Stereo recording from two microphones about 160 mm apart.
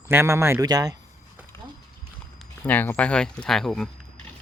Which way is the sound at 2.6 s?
10° left (ahead or behind).